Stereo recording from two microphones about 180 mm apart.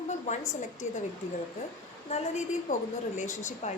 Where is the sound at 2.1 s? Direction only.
35° left (ahead or behind).